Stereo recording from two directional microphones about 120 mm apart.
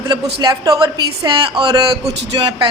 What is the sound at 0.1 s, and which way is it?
A woman's voice, 35° right (ahead or behind).